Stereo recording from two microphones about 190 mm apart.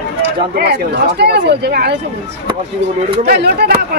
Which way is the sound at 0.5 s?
55° right (ahead or behind).